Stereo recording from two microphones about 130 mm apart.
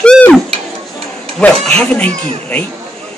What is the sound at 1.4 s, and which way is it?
A man's voice, 5° left (ahead or behind).